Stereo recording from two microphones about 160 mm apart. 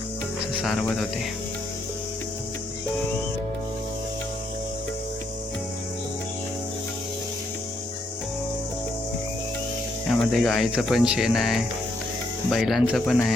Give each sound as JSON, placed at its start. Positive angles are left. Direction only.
{"t": 0.5, "sound": "speech", "side_deg": 0}
{"t": 10.1, "sound": "speech", "side_deg": 0}